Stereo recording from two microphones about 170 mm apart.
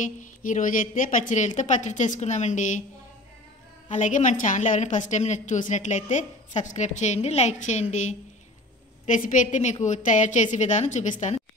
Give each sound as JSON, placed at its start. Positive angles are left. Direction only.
{"t": 0.0, "sound": "a woman's voice", "side_deg": 50}
{"t": 3.9, "sound": "a woman's voice", "side_deg": 45}